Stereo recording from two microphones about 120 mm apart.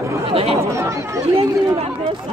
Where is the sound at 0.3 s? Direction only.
55° right (ahead or behind).